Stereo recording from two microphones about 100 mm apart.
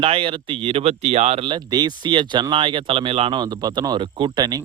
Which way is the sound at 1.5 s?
45° right (ahead or behind).